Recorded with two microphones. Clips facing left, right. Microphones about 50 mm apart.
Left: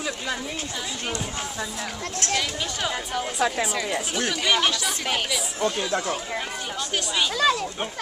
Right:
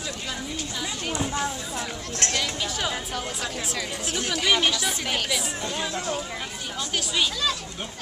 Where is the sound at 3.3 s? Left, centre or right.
Left.